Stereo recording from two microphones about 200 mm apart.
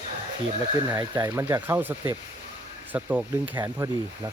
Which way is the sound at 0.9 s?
15° right (ahead or behind).